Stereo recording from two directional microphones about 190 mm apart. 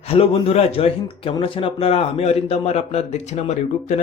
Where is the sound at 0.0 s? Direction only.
30° left (ahead or behind).